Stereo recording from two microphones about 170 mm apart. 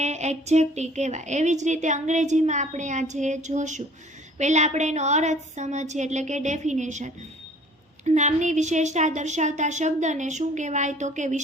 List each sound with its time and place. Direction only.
0.0 s a woman's voice: 40° right (ahead or behind)